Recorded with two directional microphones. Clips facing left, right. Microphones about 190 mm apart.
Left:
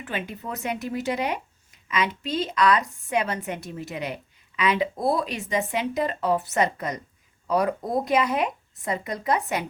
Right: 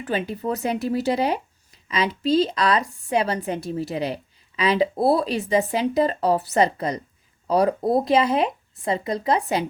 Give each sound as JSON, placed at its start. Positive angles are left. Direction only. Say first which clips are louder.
{"t": 0.0, "sound": "speech", "louder": "right 7 dB", "side_deg": -35}